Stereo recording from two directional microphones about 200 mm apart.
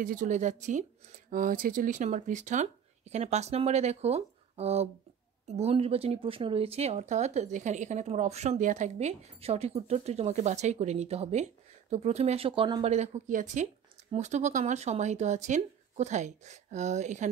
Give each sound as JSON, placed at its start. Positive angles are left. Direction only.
{"t": 0.0, "sound": "speech", "side_deg": -40}
{"t": 12.9, "sound": "speech", "side_deg": -35}